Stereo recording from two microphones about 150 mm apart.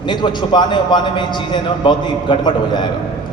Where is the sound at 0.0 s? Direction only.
30° left (ahead or behind).